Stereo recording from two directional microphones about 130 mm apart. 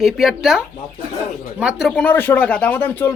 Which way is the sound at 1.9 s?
10° left (ahead or behind).